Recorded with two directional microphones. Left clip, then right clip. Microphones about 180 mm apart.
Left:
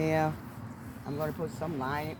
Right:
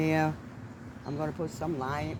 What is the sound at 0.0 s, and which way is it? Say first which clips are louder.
Speech: right 1 dB; 45° right (ahead or behind).